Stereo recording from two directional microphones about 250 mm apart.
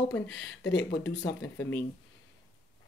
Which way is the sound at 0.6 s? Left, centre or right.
Left.